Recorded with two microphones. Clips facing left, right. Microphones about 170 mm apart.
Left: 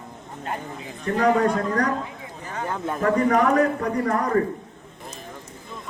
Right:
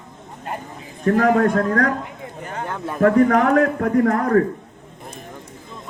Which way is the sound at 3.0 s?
55° right (ahead or behind).